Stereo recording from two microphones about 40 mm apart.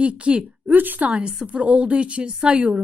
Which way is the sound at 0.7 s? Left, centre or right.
Right.